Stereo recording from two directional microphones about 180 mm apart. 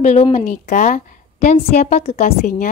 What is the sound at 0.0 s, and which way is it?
A woman's voice, 40° left (ahead or behind).